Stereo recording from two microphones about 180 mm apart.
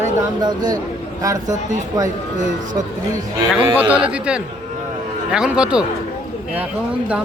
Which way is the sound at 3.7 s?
10° right (ahead or behind).